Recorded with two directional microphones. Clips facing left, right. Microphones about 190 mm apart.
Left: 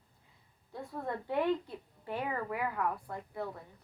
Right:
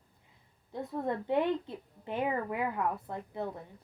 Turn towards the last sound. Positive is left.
turn(degrees=-20)  # may be behind; listen again after turning